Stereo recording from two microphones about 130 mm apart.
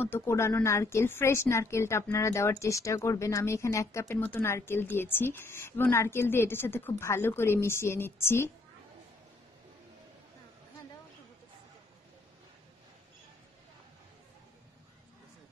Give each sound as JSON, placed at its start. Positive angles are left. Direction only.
{"t": 0.0, "sound": "speech", "side_deg": 20}